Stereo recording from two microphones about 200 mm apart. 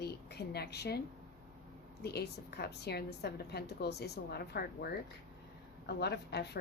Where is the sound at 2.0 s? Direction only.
55° left (ahead or behind).